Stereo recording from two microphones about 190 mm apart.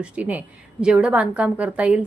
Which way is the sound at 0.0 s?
10° right (ahead or behind).